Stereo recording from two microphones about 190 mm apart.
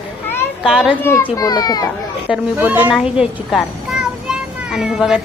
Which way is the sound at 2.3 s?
10° right (ahead or behind).